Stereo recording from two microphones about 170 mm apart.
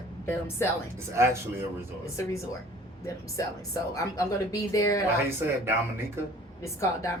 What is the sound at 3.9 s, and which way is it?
Speech, 20° left (ahead or behind).